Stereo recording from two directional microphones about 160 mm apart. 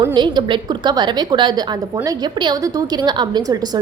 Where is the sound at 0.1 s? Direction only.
30° right (ahead or behind).